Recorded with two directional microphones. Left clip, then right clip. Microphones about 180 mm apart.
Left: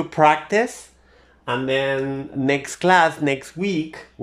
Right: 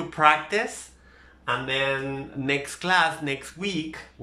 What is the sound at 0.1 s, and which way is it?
Speech, 35° left (ahead or behind).